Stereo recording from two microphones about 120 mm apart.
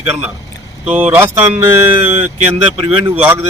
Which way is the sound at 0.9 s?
15° right (ahead or behind).